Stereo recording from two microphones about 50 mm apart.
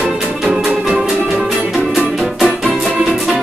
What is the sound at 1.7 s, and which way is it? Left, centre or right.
Music, centre.